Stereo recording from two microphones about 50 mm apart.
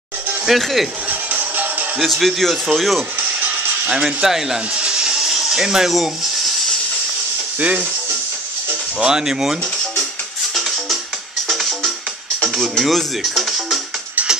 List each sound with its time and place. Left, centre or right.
0.5 s a man's voice: centre
1.0 s music: right
2.0 s a man's voice: centre
3.9 s speech: centre
4.7 s a sound: centre
9.0 s speech: centre
10.5 s music: centre
12.4 s a man's voice: centre
13.3 s music: centre